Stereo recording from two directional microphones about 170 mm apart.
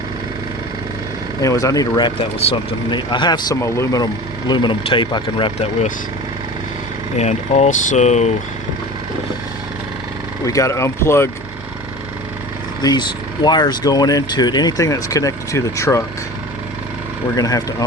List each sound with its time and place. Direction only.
1.4 s speech: 20° left (ahead or behind)
7.2 s speech: 40° left (ahead or behind)
10.4 s speech: 20° left (ahead or behind)
12.8 s speech: 25° left (ahead or behind)
17.3 s speech: 20° left (ahead or behind)